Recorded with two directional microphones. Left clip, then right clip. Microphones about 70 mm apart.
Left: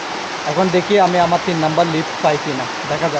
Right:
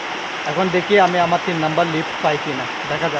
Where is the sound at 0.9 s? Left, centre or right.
Centre.